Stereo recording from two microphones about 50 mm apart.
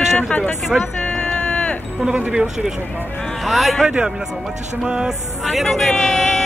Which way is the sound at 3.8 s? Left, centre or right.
Right.